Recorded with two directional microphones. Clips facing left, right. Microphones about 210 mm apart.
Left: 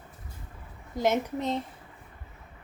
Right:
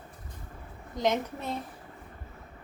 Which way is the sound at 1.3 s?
20° left (ahead or behind).